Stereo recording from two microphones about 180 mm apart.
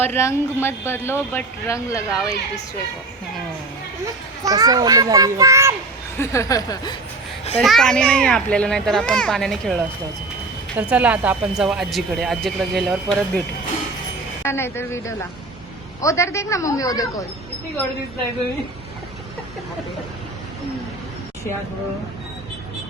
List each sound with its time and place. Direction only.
0.0 s speech: 15° left (ahead or behind)
4.4 s a child's voice: 20° right (ahead or behind)
6.1 s speech: 15° left (ahead or behind)
7.6 s speech: centre (ahead or behind)
14.4 s speech: 15° left (ahead or behind)